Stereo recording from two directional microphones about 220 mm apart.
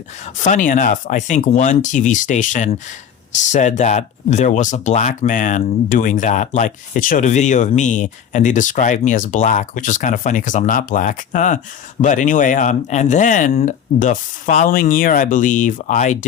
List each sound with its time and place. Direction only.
0.4 s speech: 35° left (ahead or behind)